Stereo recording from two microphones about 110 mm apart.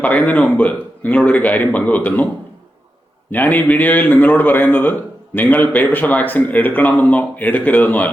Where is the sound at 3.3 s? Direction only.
15° left (ahead or behind).